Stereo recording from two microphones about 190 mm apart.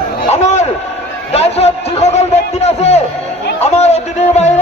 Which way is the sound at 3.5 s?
35° left (ahead or behind).